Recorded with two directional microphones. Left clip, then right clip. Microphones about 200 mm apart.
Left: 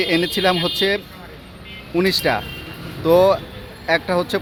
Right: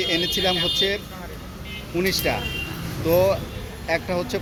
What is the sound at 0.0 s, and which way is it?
Speech, 35° left (ahead or behind).